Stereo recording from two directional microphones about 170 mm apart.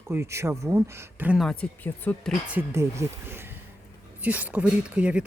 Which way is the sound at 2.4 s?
10° right (ahead or behind).